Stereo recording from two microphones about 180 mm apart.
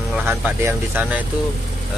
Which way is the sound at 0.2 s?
15° right (ahead or behind).